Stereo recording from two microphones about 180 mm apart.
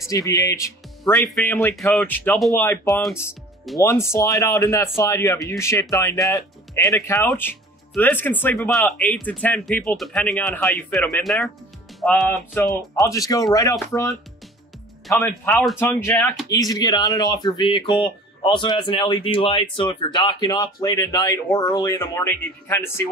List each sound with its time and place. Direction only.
0.1 s speech: 20° left (ahead or behind)
13.0 s speech: 20° left (ahead or behind)
15.0 s speech: 5° left (ahead or behind)
15.8 s speech: 10° left (ahead or behind)